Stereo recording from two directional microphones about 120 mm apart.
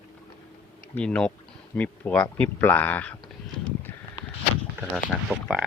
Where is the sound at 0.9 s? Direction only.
10° left (ahead or behind).